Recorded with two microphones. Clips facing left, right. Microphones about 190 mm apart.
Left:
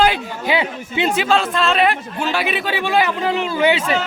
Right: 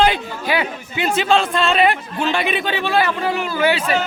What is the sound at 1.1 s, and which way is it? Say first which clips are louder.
Speech: right 3 dB; 5° left (ahead or behind).